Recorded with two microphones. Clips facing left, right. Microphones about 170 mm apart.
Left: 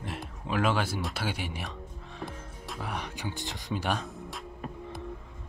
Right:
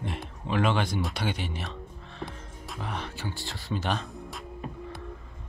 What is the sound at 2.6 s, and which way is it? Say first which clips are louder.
Music: right 1 dB; centre (ahead or behind).